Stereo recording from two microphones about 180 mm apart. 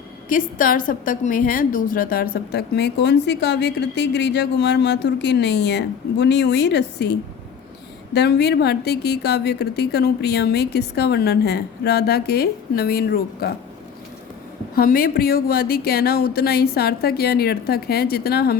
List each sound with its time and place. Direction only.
0.3 s a woman's voice: 50° left (ahead or behind)
14.8 s a woman's voice: 55° left (ahead or behind)